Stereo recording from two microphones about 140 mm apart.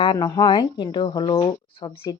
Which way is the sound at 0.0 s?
30° left (ahead or behind).